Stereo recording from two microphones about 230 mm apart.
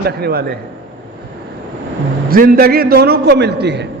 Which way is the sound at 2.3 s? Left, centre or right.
Right.